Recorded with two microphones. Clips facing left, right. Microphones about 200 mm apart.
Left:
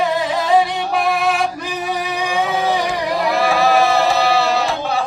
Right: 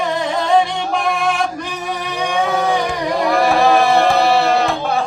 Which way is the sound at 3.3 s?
55° right (ahead or behind).